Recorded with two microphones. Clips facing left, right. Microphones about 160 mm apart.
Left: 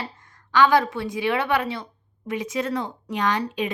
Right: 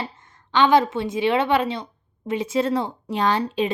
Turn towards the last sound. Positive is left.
turn(degrees=-30)  # may be behind; listen again after turning